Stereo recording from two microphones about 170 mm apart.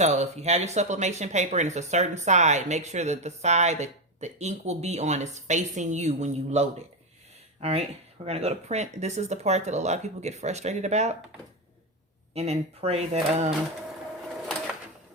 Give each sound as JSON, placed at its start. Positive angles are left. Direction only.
{"t": 0.0, "sound": "speech", "side_deg": -40}
{"t": 12.3, "sound": "speech", "side_deg": -40}